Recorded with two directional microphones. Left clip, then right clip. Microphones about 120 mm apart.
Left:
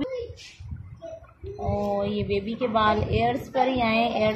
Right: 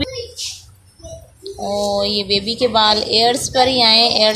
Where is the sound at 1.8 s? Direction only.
75° right (ahead or behind).